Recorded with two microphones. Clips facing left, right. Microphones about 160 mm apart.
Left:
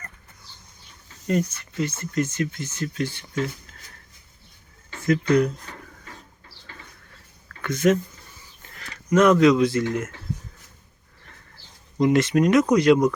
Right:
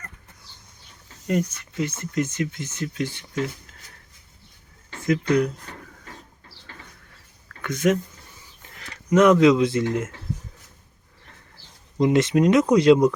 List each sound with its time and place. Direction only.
1.3 s speech: 15° right (ahead or behind)
5.0 s speech: 10° right (ahead or behind)
7.6 s speech: 15° right (ahead or behind)
11.9 s speech: 25° right (ahead or behind)